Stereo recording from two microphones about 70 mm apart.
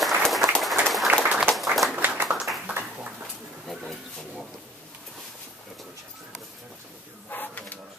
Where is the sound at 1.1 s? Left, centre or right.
Right.